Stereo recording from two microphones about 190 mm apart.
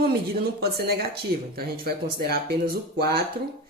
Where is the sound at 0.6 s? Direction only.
55° right (ahead or behind).